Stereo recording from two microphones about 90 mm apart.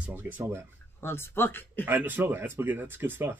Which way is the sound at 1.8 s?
20° right (ahead or behind).